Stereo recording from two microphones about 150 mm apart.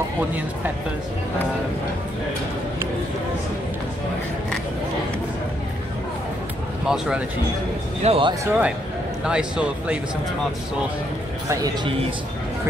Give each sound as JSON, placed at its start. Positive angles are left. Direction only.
{"t": 6.9, "sound": "a man's voice", "side_deg": -5}
{"t": 8.0, "sound": "speech", "side_deg": -40}
{"t": 8.5, "sound": "a man's voice", "side_deg": -10}
{"t": 11.4, "sound": "a man's voice", "side_deg": -25}